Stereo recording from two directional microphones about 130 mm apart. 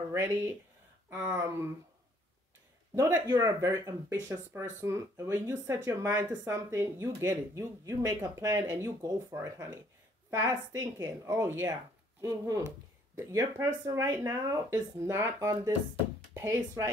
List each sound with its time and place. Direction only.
0.1 s speech: 20° right (ahead or behind)
3.0 s speech: 25° right (ahead or behind)
10.8 s speech: 20° right (ahead or behind)